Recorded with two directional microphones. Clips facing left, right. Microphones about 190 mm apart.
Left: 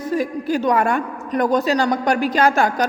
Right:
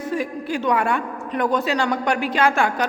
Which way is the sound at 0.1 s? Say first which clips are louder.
Left 5 dB; 40° left (ahead or behind).